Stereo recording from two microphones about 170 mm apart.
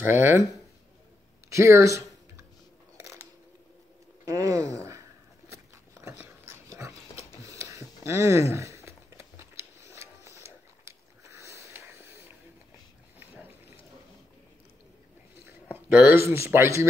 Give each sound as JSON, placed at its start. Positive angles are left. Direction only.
{"t": 0.0, "sound": "speech", "side_deg": -15}
{"t": 1.5, "sound": "a sound", "side_deg": -15}
{"t": 4.3, "sound": "a sound", "side_deg": -20}
{"t": 5.5, "sound": "biting", "side_deg": -15}
{"t": 6.2, "sound": "dog", "side_deg": -15}
{"t": 15.4, "sound": "a man's voice", "side_deg": -10}